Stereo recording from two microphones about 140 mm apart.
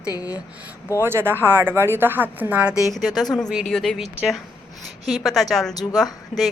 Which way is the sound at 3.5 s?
Centre (ahead or behind).